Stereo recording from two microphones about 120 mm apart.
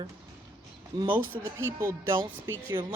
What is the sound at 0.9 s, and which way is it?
A woman's voice, 30° right (ahead or behind).